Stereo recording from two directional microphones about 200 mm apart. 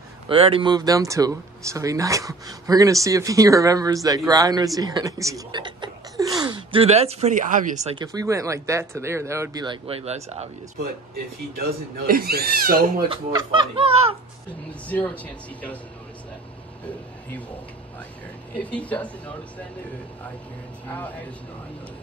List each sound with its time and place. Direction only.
0.3 s speech: 25° right (ahead or behind)
8.0 s speech: 20° right (ahead or behind)
10.8 s speech: 50° right (ahead or behind)
13.1 s speech: 25° right (ahead or behind)
14.9 s speech: 10° left (ahead or behind)
18.6 s speech: 5° left (ahead or behind)